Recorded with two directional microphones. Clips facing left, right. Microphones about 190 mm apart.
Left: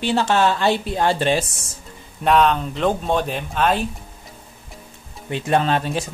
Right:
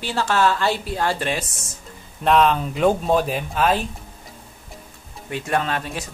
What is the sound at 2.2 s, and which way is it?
Speech, centre (ahead or behind).